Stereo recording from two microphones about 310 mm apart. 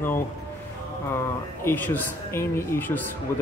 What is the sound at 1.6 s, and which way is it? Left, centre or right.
Speech, centre.